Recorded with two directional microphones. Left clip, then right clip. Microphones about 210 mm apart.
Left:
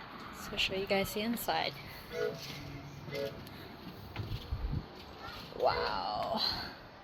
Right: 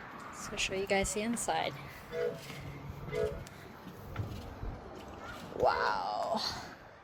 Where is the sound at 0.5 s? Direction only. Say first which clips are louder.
Even; 10° right (ahead or behind).